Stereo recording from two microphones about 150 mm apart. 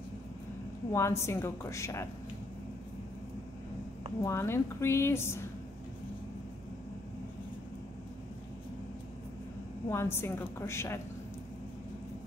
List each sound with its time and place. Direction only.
0.9 s a woman's voice: 20° left (ahead or behind)
4.2 s a woman's voice: 20° left (ahead or behind)
9.8 s a woman's voice: 15° left (ahead or behind)